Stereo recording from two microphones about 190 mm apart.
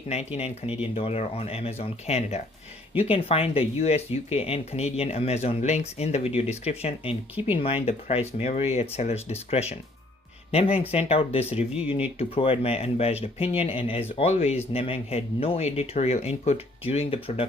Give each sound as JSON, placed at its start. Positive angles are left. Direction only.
{"t": 0.3, "sound": "speech", "side_deg": 35}